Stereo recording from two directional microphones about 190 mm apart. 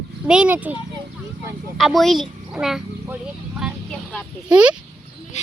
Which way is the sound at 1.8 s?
Centre (ahead or behind).